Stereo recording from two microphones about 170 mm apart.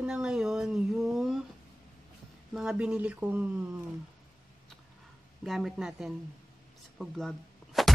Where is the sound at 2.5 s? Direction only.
5° right (ahead or behind).